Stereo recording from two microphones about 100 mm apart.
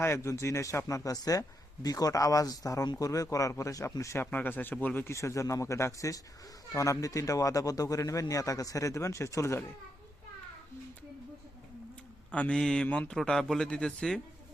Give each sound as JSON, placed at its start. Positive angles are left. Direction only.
{"t": 0.0, "sound": "a man's voice", "side_deg": 30}
{"t": 4.3, "sound": "speech", "side_deg": 20}
{"t": 5.1, "sound": "a man's voice", "side_deg": 30}
{"t": 12.3, "sound": "a man's voice", "side_deg": 10}